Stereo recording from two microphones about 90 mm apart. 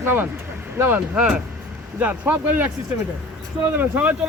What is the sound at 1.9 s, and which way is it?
Speech, 20° right (ahead or behind).